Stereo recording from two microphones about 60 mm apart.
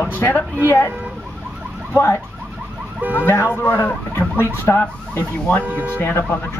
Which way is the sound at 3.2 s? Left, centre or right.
Left.